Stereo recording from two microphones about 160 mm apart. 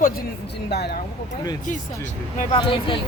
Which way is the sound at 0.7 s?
90° left.